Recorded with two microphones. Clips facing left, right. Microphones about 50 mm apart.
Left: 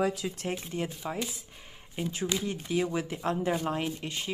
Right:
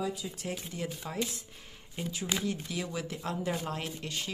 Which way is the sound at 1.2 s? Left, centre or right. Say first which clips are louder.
Right 1 dB; centre.